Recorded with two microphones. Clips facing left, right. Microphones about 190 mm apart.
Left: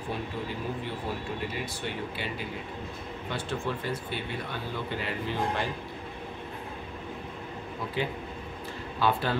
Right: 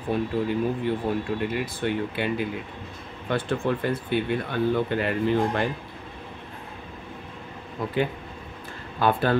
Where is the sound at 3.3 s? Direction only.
55° right (ahead or behind).